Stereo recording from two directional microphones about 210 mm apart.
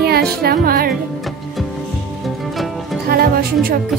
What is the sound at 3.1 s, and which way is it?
Speech, 45° right (ahead or behind).